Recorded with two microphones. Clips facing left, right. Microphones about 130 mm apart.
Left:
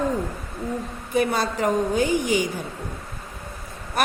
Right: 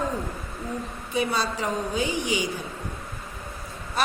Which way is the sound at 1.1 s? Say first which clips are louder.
Left 4 dB; 50° left (ahead or behind).